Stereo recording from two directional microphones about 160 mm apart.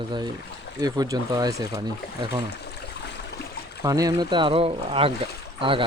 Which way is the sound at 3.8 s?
20° right (ahead or behind).